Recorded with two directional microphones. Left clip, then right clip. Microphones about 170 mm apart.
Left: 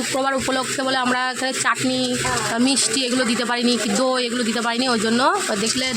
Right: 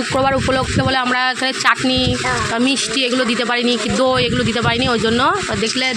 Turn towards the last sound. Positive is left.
turn(degrees=-10)  # may be behind; listen again after turning